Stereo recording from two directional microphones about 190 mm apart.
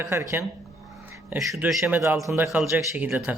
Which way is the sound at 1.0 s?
10° right (ahead or behind).